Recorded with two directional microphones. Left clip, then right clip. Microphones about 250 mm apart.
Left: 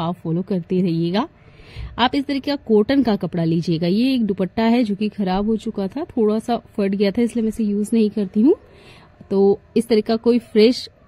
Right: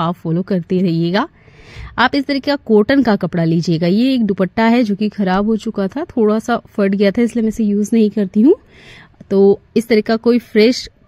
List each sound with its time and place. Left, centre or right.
0.0 s speech: right